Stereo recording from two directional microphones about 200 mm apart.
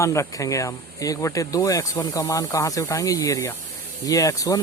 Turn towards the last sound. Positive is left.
turn(degrees=15)  # may be behind; listen again after turning